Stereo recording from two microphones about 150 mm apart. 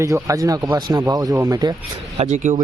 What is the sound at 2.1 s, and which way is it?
Speech, 50° right (ahead or behind).